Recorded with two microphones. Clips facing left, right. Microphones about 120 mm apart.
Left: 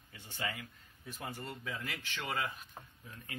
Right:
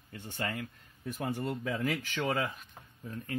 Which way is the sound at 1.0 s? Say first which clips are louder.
Right 9 dB; 50° right (ahead or behind).